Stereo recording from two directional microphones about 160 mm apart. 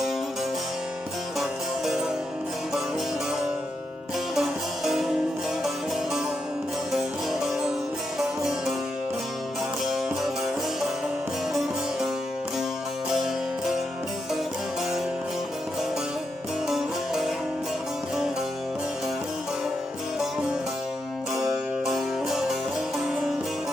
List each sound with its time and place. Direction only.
1.4 s music: centre (ahead or behind)
4.4 s music: centre (ahead or behind)
6.9 s music: 5° right (ahead or behind)
9.9 s music: centre (ahead or behind)
16.6 s music: centre (ahead or behind)
21.3 s music: 20° right (ahead or behind)
21.8 s music: centre (ahead or behind)